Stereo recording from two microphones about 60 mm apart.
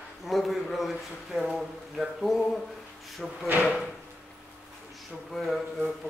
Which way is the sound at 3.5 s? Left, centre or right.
Right.